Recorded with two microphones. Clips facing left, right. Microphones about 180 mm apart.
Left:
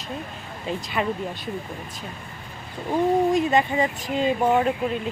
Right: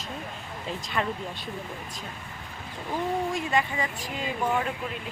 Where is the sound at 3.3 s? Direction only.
20° left (ahead or behind).